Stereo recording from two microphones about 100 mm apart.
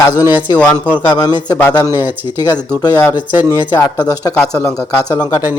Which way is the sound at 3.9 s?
40° left (ahead or behind).